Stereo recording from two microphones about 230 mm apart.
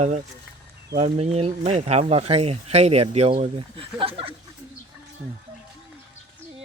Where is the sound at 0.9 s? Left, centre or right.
Right.